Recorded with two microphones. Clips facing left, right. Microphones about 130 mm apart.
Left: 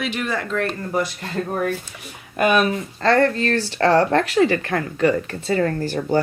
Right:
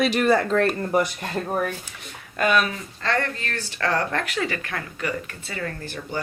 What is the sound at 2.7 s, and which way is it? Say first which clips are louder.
Speech: left 8 dB; 35° left (ahead or behind).